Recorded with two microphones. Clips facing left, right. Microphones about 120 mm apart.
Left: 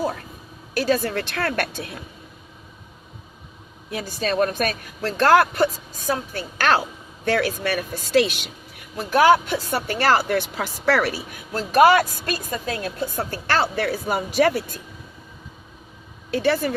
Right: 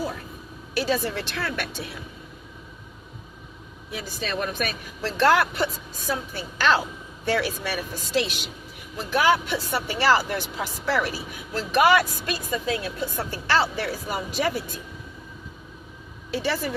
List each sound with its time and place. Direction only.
0.7 s speech: 45° left (ahead or behind)
3.8 s speech: 50° left (ahead or behind)
6.1 s a woman's voice: 55° left (ahead or behind)
9.0 s speech: 45° left (ahead or behind); by 11.1 s 75° left (ahead or behind)
11.5 s a woman's voice: 40° left (ahead or behind); by 14.8 s 65° left (ahead or behind)
16.3 s a woman's voice: 55° left (ahead or behind)